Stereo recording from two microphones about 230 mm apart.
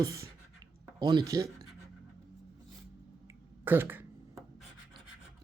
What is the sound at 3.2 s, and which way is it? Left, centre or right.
Scratch, centre.